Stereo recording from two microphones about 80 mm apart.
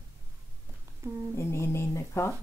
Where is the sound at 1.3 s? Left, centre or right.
Left.